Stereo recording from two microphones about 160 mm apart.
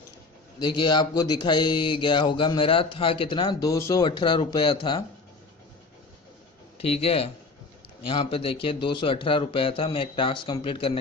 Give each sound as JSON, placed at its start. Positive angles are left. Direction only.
{"t": 0.6, "sound": "speech", "side_deg": 30}
{"t": 7.0, "sound": "speech", "side_deg": 35}